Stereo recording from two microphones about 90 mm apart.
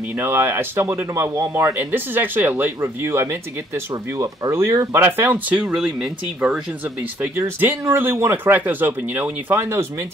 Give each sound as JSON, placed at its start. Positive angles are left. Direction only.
{"t": 0.1, "sound": "speech", "side_deg": -25}